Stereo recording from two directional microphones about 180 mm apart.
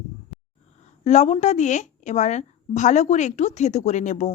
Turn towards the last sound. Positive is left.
turn(degrees=40)  # may be behind; listen again after turning